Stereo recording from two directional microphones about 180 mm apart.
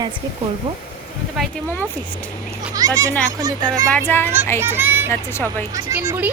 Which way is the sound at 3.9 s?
10° left (ahead or behind).